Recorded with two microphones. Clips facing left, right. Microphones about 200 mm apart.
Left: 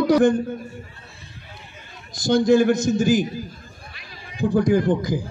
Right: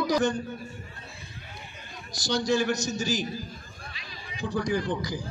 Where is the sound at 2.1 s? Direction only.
55° left (ahead or behind).